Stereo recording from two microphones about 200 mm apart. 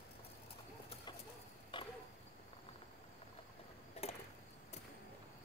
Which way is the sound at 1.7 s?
25° left (ahead or behind).